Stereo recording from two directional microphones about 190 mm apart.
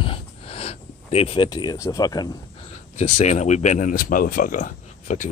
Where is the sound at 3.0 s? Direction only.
35° left (ahead or behind).